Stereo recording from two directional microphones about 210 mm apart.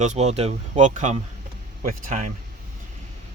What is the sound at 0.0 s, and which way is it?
Speech, 35° right (ahead or behind).